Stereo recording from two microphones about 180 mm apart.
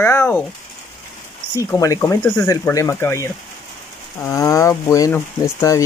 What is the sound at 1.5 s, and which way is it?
Speech, 20° left (ahead or behind).